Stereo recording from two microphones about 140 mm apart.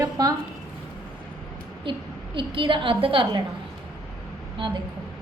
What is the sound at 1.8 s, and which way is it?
A woman's voice, 35° right (ahead or behind).